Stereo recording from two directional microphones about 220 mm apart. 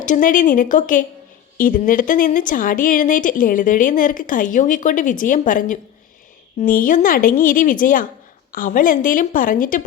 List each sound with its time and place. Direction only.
0.0 s speech: 35° left (ahead or behind)